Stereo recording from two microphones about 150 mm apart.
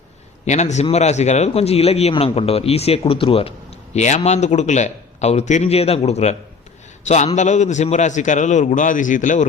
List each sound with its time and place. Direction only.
0.4 s a man's voice: 50° left (ahead or behind)
3.9 s a man's voice: 50° left (ahead or behind)
7.3 s a man's voice: 55° left (ahead or behind)